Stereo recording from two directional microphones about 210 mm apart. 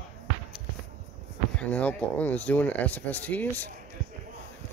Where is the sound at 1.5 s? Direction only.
5° left (ahead or behind).